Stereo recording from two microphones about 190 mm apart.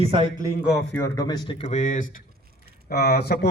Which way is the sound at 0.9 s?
15° left (ahead or behind).